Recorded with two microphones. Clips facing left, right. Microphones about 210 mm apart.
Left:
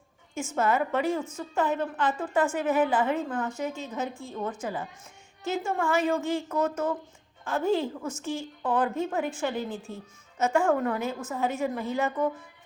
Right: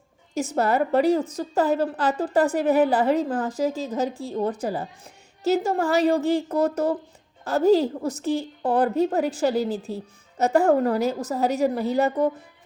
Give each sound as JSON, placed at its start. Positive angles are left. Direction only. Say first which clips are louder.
{"t": 0.3, "sound": "a woman's voice", "louder": "right 4 dB", "side_deg": -35}